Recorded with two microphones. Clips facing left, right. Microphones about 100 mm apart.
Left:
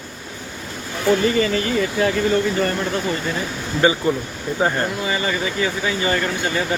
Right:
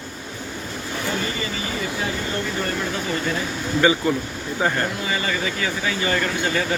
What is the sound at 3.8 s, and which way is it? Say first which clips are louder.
A man's voice: left 1 dB; 25° left (ahead or behind).